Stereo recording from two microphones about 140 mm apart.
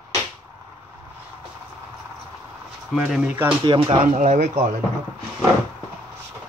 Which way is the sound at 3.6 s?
35° right (ahead or behind).